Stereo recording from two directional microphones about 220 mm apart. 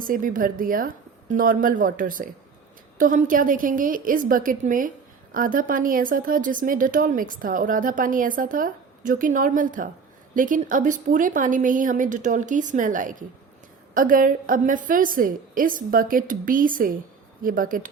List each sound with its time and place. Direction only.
0.0 s a woman's voice: 40° right (ahead or behind)